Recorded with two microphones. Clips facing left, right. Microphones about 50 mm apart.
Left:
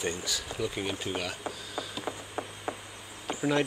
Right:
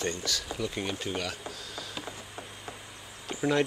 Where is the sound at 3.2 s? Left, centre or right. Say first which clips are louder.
Even; centre.